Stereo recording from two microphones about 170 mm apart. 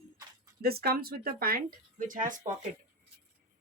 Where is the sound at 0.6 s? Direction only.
65° right (ahead or behind); by 2.4 s 50° right (ahead or behind).